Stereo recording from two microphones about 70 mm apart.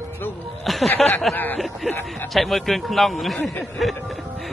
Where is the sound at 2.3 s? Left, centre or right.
Centre.